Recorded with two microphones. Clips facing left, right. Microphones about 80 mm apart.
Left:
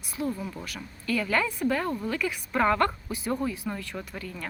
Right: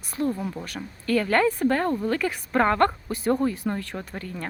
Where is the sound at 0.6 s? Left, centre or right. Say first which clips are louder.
Right 4 dB; right.